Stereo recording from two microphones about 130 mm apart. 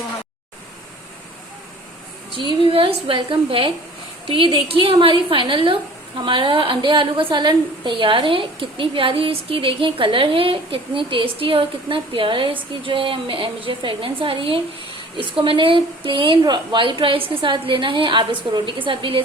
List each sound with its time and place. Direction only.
2.3 s a woman's voice: 40° right (ahead or behind)